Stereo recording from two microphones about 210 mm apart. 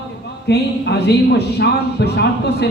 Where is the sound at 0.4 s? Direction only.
50° left (ahead or behind).